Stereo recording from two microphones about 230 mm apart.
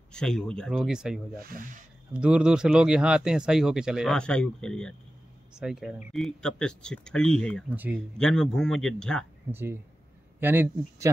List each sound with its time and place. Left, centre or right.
0.1 s speech: centre
1.4 s speech: right
2.1 s speech: centre
7.7 s speech: centre
8.2 s speech: centre
9.5 s speech: centre